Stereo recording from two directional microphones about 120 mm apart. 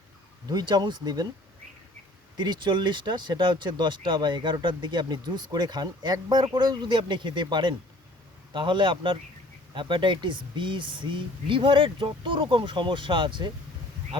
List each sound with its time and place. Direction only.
0.5 s speech: 35° right (ahead or behind)
2.3 s speech: 35° right (ahead or behind)